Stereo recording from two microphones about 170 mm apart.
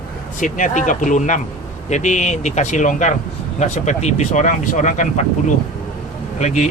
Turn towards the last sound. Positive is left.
turn(degrees=45)  # may be behind; listen again after turning